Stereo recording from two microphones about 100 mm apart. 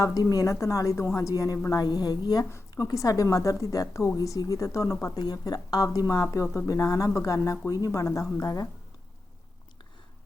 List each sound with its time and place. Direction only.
0.0 s a woman's voice: 40° left (ahead or behind)
5.2 s speech: 45° left (ahead or behind)
6.3 s a woman's voice: 30° left (ahead or behind)